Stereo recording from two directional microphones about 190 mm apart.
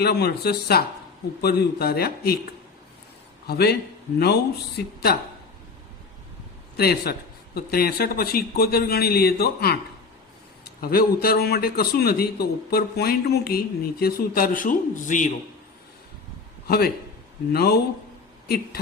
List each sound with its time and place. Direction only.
0.0 s a man's voice: 55° left (ahead or behind)
6.7 s a man's voice: 55° left (ahead or behind)
16.6 s a man's voice: 55° left (ahead or behind)